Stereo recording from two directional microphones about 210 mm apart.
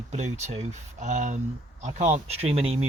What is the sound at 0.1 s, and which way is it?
Speech, 35° right (ahead or behind).